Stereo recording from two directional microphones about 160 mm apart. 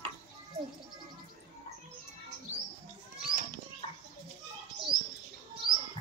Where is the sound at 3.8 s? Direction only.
35° left (ahead or behind).